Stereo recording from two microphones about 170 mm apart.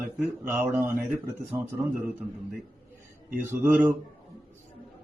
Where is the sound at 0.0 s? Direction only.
10° right (ahead or behind).